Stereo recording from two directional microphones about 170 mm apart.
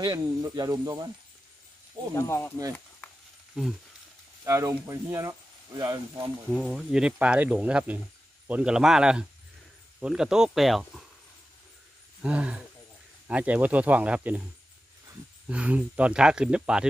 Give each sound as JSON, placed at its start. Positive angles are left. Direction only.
{"t": 0.0, "sound": "speech", "side_deg": -25}
{"t": 2.1, "sound": "speech", "side_deg": 15}
{"t": 3.6, "sound": "speech", "side_deg": -5}
{"t": 4.5, "sound": "speech", "side_deg": -20}
{"t": 6.5, "sound": "speech", "side_deg": -5}
{"t": 12.2, "sound": "speech", "side_deg": -5}
{"t": 15.4, "sound": "speech", "side_deg": -5}